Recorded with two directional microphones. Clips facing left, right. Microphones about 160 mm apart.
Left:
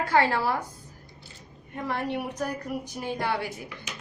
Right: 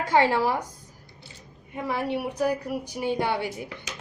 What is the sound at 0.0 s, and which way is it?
Speech, 15° right (ahead or behind).